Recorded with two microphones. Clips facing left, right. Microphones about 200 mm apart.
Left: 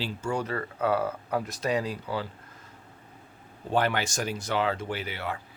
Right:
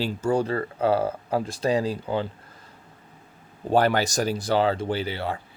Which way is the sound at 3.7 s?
40° right (ahead or behind).